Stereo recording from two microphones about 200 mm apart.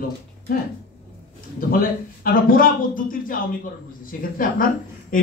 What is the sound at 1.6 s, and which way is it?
A man's voice, 45° left (ahead or behind).